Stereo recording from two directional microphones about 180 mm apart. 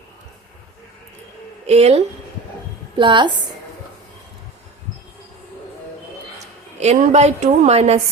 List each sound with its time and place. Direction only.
1.6 s a woman's voice: 35° right (ahead or behind)
6.7 s a woman's voice: 40° right (ahead or behind)